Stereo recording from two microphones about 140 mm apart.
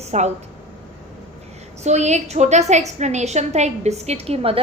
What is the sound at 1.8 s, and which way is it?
A woman's voice, 55° right (ahead or behind).